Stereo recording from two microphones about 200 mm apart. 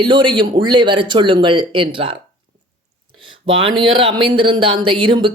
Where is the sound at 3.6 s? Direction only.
25° right (ahead or behind).